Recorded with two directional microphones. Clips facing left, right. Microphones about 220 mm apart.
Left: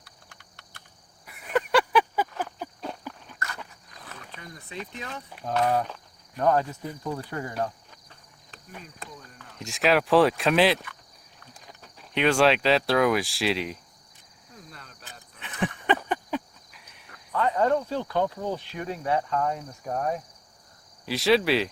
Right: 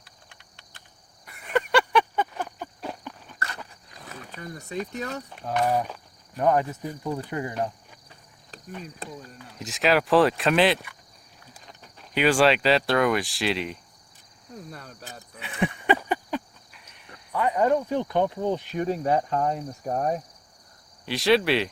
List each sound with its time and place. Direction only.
0.0 s clip-clop: 20° right (ahead or behind)
1.2 s a sound: 5° left (ahead or behind)
3.3 s dog: 30° right (ahead or behind)
4.4 s speech: 45° right (ahead or behind)
5.5 s speech: 10° right (ahead or behind)
9.4 s speech: centre (ahead or behind)
14.7 s cricket: 45° right (ahead or behind)
15.4 s a sound: 10° right (ahead or behind)
17.3 s speech: 10° right (ahead or behind)
18.8 s speech: 35° right (ahead or behind)
21.0 s speech: centre (ahead or behind)